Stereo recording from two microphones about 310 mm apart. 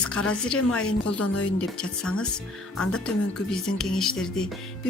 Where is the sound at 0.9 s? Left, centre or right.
Left.